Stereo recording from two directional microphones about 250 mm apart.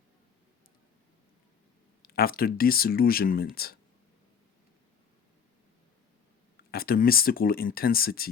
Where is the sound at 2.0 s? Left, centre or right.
Left.